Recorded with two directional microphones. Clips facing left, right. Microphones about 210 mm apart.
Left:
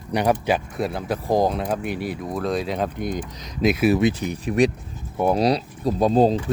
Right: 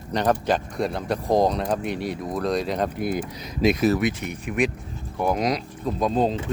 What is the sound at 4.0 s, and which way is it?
Speech, 30° left (ahead or behind).